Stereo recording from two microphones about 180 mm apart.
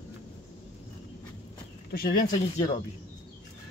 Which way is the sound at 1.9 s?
60° left (ahead or behind).